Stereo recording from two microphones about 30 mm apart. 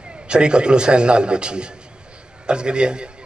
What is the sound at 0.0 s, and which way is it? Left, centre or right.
A man's voice, right.